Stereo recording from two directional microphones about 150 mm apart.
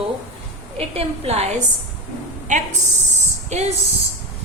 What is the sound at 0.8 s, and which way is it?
A woman's voice, 40° right (ahead or behind).